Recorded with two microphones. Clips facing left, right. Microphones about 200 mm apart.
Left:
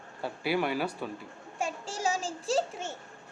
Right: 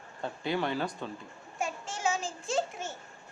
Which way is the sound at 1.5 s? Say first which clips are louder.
Left 2 dB; 30° left (ahead or behind).